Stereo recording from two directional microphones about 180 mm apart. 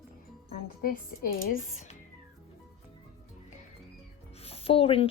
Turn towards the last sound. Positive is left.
turn(degrees=30)  # may be behind; listen again after turning